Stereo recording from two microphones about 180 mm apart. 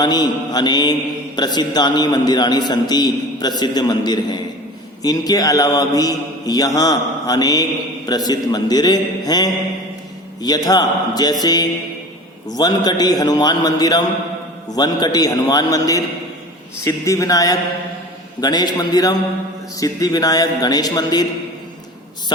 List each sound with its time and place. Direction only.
0.0 s a man's voice: 20° left (ahead or behind)